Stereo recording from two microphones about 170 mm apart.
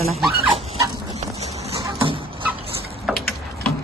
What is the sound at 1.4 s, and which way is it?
Clip-clop, 40° right (ahead or behind).